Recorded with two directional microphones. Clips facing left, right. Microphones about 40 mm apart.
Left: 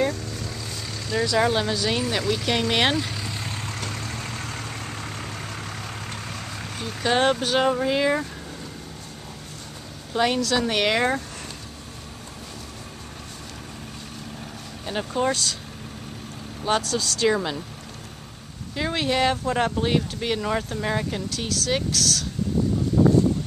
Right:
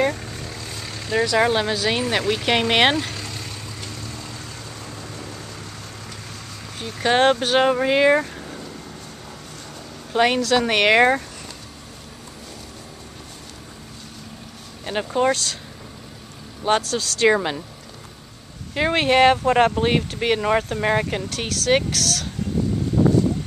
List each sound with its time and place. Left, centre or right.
0.0 s vehicle: right
0.3 s vehicle: centre
1.5 s speech: centre
3.0 s speech: centre
3.3 s vehicle: left
4.5 s vehicle: left
6.8 s speech: right
10.1 s speech: right
14.9 s speech: right
16.6 s speech: right
17.0 s speech: right
18.8 s speech: right